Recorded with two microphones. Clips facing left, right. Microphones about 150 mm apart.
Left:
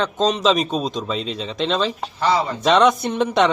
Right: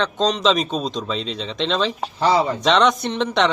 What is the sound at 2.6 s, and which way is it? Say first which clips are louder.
Speech: left 2 dB; 5° left (ahead or behind).